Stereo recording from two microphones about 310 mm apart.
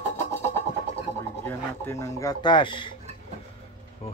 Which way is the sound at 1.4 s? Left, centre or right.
Centre.